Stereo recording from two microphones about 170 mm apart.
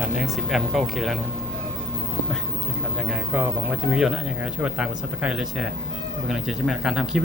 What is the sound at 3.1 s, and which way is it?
Speech, 5° right (ahead or behind).